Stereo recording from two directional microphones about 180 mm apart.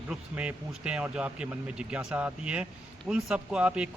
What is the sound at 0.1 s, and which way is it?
A man's voice, 5° right (ahead or behind).